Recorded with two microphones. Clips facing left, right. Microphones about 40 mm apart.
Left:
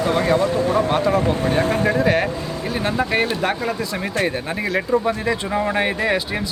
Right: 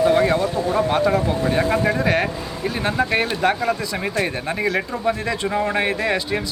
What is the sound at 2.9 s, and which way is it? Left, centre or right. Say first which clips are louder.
Speech: even; centre.